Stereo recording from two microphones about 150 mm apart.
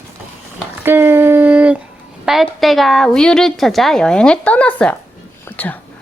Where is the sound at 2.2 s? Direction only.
Centre (ahead or behind).